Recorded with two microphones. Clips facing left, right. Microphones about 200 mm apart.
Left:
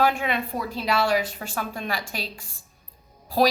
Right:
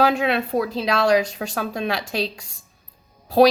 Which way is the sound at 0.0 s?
75° right (ahead or behind).